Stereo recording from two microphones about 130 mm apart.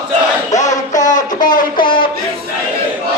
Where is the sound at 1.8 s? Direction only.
90° left.